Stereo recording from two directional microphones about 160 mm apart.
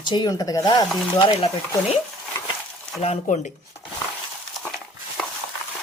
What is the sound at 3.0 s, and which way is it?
Speech, 40° left (ahead or behind).